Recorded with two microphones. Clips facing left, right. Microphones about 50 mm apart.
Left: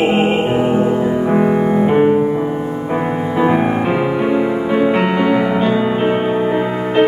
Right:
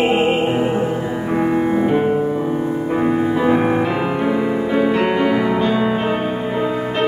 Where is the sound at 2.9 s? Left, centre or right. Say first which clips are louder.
Right 2 dB; centre.